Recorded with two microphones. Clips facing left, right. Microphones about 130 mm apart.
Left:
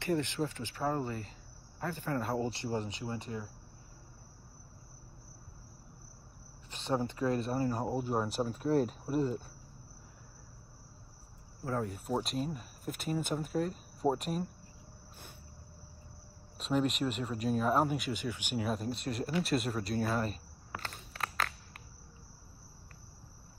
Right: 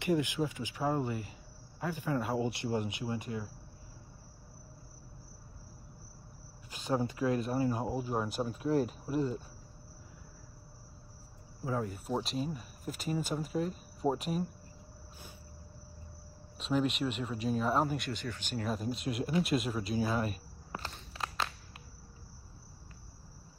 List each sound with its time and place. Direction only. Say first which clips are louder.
0.0 s speech: right 2 dB; 10° right (ahead or behind)
6.7 s speech: right 1 dB; 5° right (ahead or behind)
8.6 s speech: left 1 dB; 40° left (ahead or behind)
9.1 s speech: left 1 dB; centre (ahead or behind)
11.6 s speech: even; 5° right (ahead or behind)
16.5 s speech: even; centre (ahead or behind)